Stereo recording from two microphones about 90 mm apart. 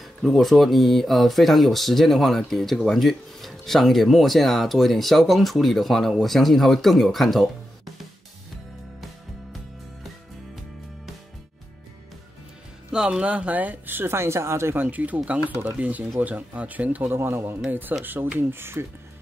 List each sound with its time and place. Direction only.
0.0 s speech: centre (ahead or behind)
12.9 s speech: 10° right (ahead or behind); by 18.9 s 25° right (ahead or behind)